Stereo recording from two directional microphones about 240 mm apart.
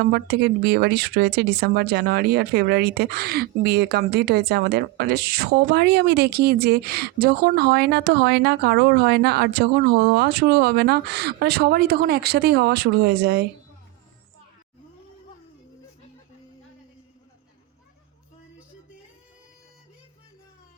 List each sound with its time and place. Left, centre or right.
0.0 s speech: right